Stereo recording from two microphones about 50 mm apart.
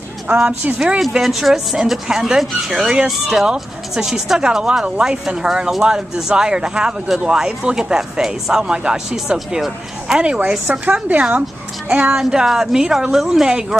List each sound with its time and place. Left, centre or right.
0.3 s a woman's voice: right
0.7 s speech: centre
1.1 s speech: centre
10.7 s a woman's voice: right
12.1 s speech: centre